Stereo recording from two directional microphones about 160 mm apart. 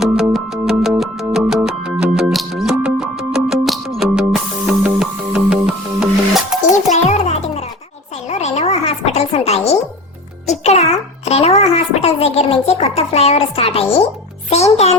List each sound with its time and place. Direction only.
0.0 s music: 5° right (ahead or behind)
6.7 s music: 50° left (ahead or behind)
8.3 s a sound: 45° left (ahead or behind)
14.5 s music: 40° left (ahead or behind)